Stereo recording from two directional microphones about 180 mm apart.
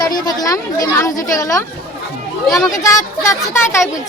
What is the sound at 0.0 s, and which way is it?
A woman's voice, 20° left (ahead or behind).